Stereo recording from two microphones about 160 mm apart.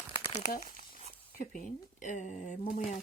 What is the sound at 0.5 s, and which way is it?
Crumpling, 60° left (ahead or behind).